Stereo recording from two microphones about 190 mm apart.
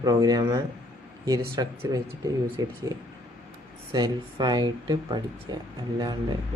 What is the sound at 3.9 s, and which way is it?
Speech, 20° right (ahead or behind).